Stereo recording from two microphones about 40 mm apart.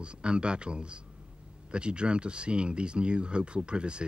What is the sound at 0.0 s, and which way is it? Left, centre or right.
Speech, right.